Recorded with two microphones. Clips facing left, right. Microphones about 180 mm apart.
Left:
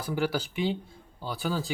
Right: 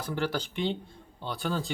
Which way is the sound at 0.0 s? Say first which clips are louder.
Left 2 dB; 10° left (ahead or behind).